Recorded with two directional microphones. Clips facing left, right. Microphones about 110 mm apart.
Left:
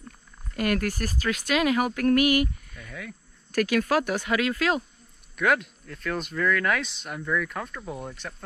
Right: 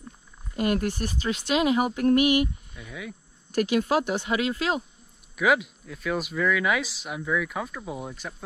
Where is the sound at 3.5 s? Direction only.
20° right (ahead or behind).